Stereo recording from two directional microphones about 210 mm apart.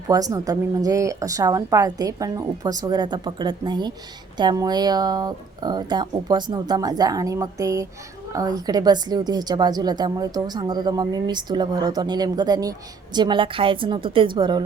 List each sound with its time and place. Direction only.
0.1 s a woman's voice: 15° right (ahead or behind)